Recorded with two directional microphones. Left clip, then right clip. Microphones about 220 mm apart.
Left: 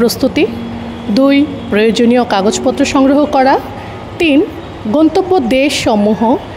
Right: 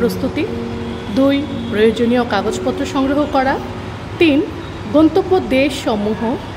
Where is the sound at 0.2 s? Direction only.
35° left (ahead or behind).